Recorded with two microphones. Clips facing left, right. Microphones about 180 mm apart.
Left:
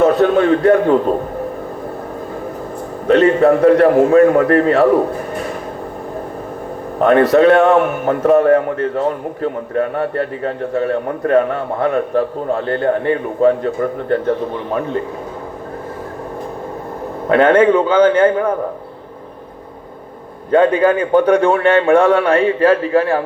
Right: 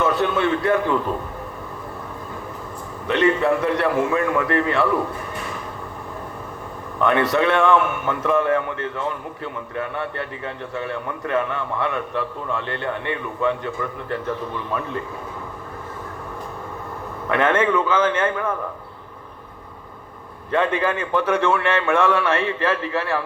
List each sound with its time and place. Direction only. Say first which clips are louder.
0.0 s a man's voice: left 8 dB; 40° left (ahead or behind)
3.1 s a man's voice: left 8 dB; 40° left (ahead or behind)
7.0 s a man's voice: left 9 dB; 40° left (ahead or behind)
17.2 s a man's voice: left 9 dB; 35° left (ahead or behind)
20.5 s a man's voice: left 9 dB; 35° left (ahead or behind)